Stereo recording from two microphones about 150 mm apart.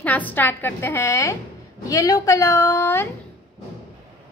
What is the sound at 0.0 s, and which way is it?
A woman's voice, 10° left (ahead or behind).